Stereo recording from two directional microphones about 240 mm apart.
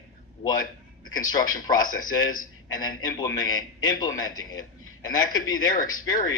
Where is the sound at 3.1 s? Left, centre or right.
Centre.